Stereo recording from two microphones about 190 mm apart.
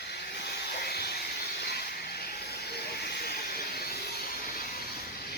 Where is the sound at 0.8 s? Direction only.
55° left (ahead or behind).